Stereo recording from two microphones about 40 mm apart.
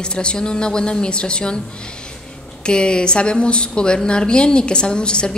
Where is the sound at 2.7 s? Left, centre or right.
Left.